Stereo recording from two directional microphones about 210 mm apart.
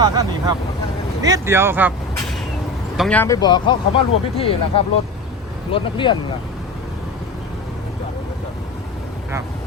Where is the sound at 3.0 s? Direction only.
5° left (ahead or behind).